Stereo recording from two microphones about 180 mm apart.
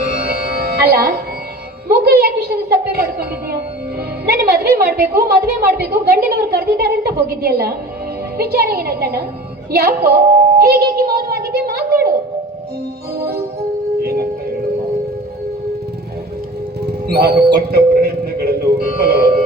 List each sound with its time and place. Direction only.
0.0 s music: 60° right (ahead or behind)
2.0 s a woman's voice: 60° right (ahead or behind)
13.1 s music: 60° right (ahead or behind)
14.0 s singing bowl: 55° right (ahead or behind)
17.1 s music: 60° right (ahead or behind)